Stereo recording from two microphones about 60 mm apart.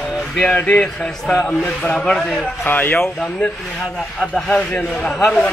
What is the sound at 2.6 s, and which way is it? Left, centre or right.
Speech, left.